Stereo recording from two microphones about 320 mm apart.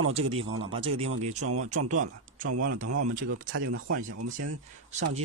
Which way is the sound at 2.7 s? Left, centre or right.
Right.